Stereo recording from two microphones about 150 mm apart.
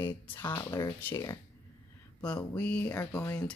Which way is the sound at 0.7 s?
25° left (ahead or behind).